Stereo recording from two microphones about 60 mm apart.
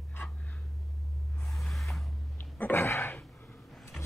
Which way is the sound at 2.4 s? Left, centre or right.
Left.